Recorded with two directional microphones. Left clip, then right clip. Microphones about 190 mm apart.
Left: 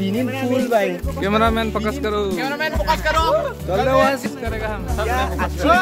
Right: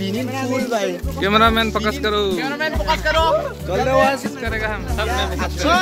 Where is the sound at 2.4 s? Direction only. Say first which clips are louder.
Even; 70° left (ahead or behind).